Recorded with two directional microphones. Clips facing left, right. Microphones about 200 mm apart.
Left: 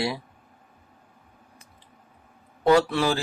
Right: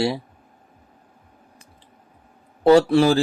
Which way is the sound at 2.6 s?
30° right (ahead or behind).